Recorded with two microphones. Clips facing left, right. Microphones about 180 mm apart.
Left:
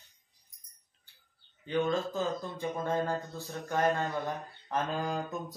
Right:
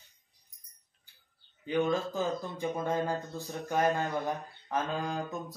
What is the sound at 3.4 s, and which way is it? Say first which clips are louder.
Mantra: right 2 dB; 15° right (ahead or behind).